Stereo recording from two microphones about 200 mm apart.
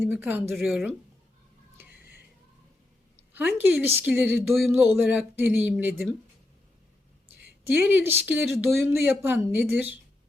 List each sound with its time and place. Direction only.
0.0 s speech: 10° right (ahead or behind)
3.3 s speech: 10° right (ahead or behind)
7.7 s speech: 10° right (ahead or behind)